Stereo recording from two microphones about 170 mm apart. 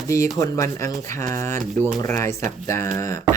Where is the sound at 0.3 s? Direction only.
20° left (ahead or behind).